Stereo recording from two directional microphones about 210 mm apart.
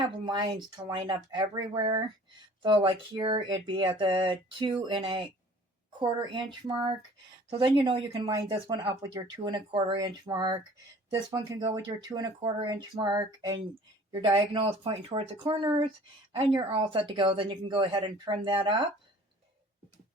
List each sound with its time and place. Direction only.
0.3 s speech: 20° right (ahead or behind)